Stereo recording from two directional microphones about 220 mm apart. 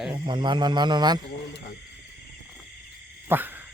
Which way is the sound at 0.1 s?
20° right (ahead or behind).